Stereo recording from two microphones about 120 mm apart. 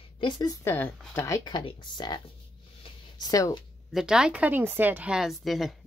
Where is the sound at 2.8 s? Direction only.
50° left (ahead or behind).